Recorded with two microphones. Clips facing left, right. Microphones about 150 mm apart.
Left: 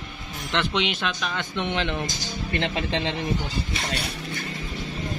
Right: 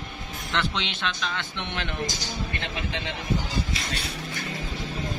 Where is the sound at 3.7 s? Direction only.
70° left (ahead or behind).